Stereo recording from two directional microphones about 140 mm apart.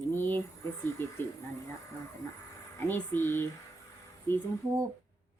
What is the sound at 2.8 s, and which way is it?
Speech, 15° left (ahead or behind).